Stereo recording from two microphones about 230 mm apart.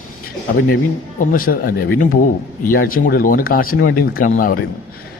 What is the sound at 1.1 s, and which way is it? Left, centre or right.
A man's voice, left.